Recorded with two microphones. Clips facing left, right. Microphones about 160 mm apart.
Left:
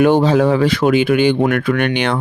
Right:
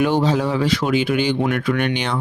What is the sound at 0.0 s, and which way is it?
Speech, 55° left (ahead or behind).